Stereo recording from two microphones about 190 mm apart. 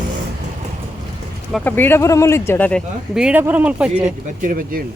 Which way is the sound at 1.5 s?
10° left (ahead or behind).